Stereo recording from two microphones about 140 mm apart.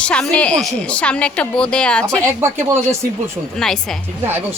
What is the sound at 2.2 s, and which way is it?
Speech, 20° right (ahead or behind).